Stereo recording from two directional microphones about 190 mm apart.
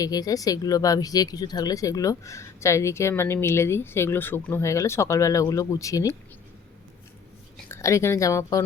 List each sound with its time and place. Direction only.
0.0 s speech: 20° left (ahead or behind)
7.7 s speech: 15° left (ahead or behind)